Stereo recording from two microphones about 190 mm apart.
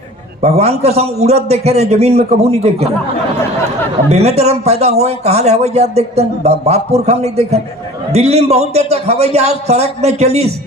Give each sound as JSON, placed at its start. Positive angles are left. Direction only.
{"t": 0.4, "sound": "speech", "side_deg": -35}
{"t": 4.1, "sound": "speech", "side_deg": -35}